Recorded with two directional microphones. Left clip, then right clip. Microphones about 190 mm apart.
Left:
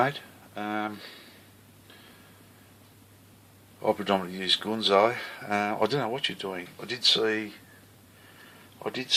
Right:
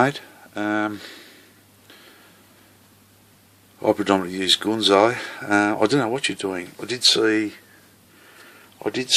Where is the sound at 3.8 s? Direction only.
50° right (ahead or behind).